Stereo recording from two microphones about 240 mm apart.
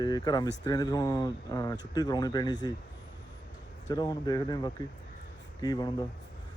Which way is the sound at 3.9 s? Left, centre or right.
Centre.